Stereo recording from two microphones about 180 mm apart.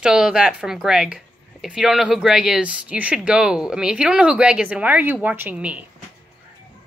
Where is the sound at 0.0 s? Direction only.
5° right (ahead or behind).